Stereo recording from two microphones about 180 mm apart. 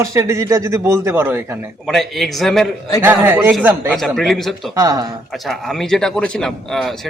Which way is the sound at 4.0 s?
Centre (ahead or behind).